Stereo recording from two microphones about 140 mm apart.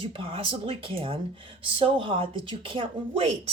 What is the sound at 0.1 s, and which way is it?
A woman's voice, 40° right (ahead or behind).